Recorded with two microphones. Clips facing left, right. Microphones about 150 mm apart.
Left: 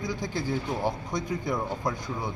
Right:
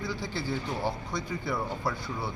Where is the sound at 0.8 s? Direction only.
20° left (ahead or behind).